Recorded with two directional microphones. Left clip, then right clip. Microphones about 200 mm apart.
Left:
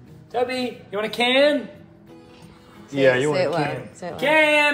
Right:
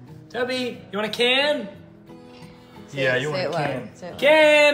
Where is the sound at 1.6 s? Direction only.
Centre (ahead or behind).